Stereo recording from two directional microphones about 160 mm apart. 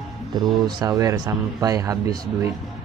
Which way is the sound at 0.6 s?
20° right (ahead or behind).